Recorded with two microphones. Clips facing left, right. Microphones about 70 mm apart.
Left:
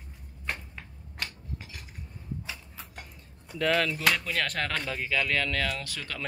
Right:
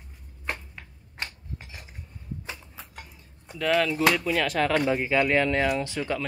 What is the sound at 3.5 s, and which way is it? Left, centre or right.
Speech, centre.